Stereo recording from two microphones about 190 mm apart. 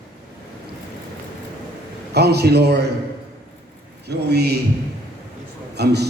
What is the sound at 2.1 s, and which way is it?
Speech, 60° right (ahead or behind).